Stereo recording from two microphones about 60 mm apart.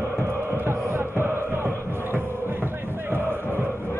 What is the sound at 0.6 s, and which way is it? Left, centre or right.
Music, right.